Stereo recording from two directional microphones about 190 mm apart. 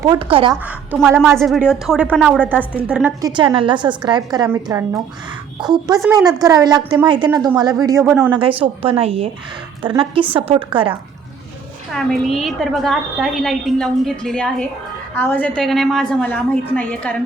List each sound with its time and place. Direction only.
0.0 s a woman's voice: 25° right (ahead or behind)
1.4 s a woman's voice: centre (ahead or behind)
3.2 s a woman's voice: 20° right (ahead or behind); by 6.2 s centre (ahead or behind)
6.2 s a woman's voice: 20° right (ahead or behind)
8.3 s a woman's voice: 25° right (ahead or behind)
11.9 s a woman's voice: centre (ahead or behind)